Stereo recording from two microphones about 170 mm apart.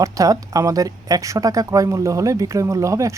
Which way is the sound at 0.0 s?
20° right (ahead or behind).